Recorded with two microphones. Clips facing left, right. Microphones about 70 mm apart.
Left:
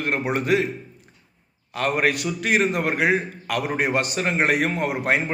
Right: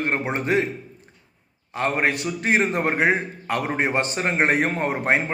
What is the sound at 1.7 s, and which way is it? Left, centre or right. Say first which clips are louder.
A man's voice: left 1 dB; right.